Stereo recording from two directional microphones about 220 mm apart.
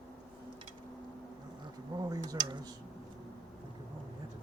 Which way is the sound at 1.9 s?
15° right (ahead or behind).